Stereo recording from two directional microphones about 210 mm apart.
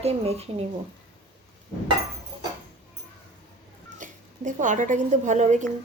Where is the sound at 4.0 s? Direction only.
40° right (ahead or behind).